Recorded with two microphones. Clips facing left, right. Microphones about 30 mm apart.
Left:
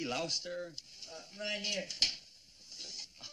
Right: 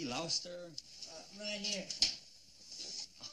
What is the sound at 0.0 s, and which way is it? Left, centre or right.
Speech, left.